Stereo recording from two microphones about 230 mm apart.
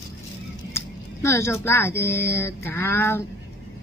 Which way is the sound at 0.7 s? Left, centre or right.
Centre.